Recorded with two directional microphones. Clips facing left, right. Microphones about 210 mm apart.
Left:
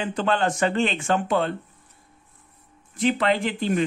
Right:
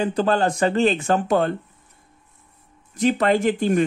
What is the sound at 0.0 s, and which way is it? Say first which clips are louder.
Speech: right 4 dB; 40° right (ahead or behind).